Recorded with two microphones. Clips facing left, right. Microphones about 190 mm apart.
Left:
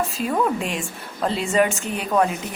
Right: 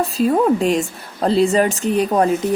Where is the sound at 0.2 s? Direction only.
35° right (ahead or behind).